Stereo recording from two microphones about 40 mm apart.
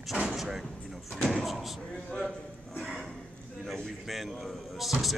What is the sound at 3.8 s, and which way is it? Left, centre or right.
A man's voice, centre.